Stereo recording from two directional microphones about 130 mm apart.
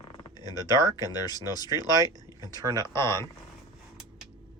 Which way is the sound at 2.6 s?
30° right (ahead or behind).